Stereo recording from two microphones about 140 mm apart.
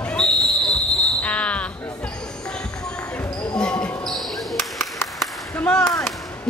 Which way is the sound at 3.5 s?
5° left (ahead or behind).